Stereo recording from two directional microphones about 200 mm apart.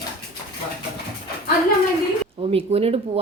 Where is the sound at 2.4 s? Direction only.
30° right (ahead or behind).